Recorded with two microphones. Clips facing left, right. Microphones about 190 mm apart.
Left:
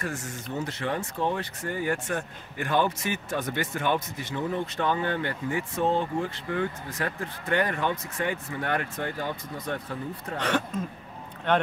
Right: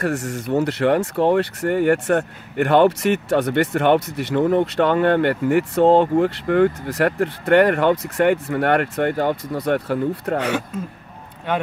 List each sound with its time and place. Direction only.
0.0 s speech: 70° right (ahead or behind)
11.5 s speech: 10° right (ahead or behind)